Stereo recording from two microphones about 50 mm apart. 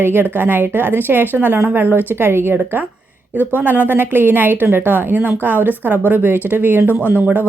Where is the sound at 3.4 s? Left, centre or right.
Right.